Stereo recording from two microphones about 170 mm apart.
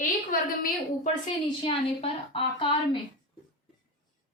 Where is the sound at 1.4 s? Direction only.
30° left (ahead or behind).